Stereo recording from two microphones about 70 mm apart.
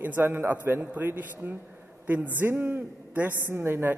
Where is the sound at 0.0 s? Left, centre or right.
Right.